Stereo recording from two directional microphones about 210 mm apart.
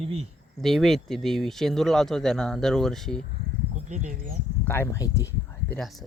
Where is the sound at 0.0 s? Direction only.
30° right (ahead or behind).